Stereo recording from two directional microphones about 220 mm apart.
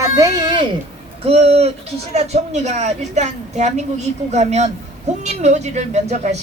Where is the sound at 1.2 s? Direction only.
25° right (ahead or behind).